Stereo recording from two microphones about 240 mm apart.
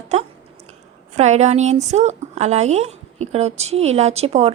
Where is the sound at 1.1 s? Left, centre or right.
Right.